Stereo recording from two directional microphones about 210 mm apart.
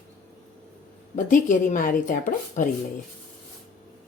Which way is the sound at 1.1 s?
40° left (ahead or behind).